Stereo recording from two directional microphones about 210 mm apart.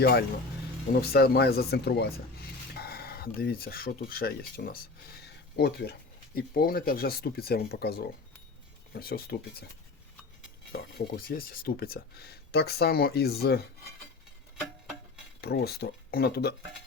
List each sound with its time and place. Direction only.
0.0 s speech: 45° left (ahead or behind)
10.7 s speech: 45° left (ahead or behind)
15.4 s speech: 50° left (ahead or behind)